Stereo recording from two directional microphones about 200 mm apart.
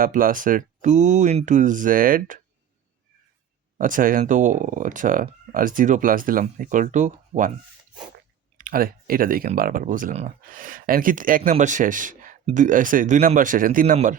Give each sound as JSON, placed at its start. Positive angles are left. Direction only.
{"t": 0.0, "sound": "speech", "side_deg": -45}
{"t": 3.8, "sound": "speech", "side_deg": -40}
{"t": 8.5, "sound": "speech", "side_deg": -45}